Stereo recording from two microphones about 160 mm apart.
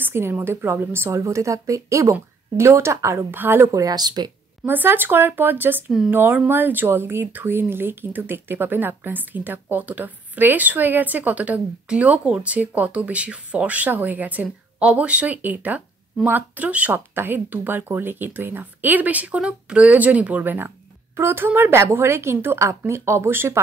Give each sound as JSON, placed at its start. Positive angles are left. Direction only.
{"t": 0.0, "sound": "speech", "side_deg": -15}
{"t": 4.6, "sound": "speech", "side_deg": -10}